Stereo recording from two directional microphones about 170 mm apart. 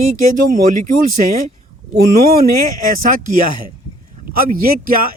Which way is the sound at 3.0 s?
55° right (ahead or behind).